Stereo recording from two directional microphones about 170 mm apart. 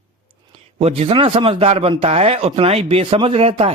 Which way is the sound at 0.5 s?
35° right (ahead or behind).